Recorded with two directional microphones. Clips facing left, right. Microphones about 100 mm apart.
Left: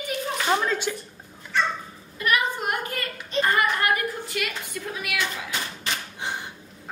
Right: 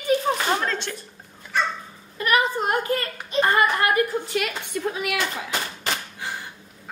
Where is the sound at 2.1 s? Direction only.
35° right (ahead or behind).